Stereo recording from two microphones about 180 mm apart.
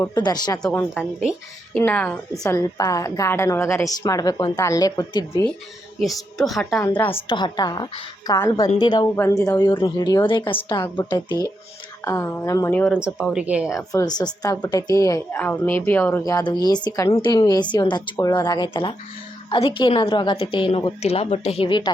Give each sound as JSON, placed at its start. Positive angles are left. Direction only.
{"t": 0.0, "sound": "speech", "side_deg": 20}
{"t": 0.6, "sound": "a woman's voice", "side_deg": 10}
{"t": 2.4, "sound": "a woman's voice", "side_deg": 20}
{"t": 6.0, "sound": "a woman's voice", "side_deg": 0}
{"t": 6.8, "sound": "a woman's voice", "side_deg": 15}
{"t": 7.3, "sound": "a woman's voice", "side_deg": 25}
{"t": 12.9, "sound": "speech", "side_deg": -5}
{"t": 13.7, "sound": "a woman's voice", "side_deg": 20}